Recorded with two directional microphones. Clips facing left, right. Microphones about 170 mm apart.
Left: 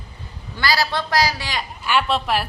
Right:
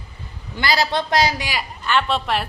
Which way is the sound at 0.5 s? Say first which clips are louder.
Right 1 dB; 20° right (ahead or behind).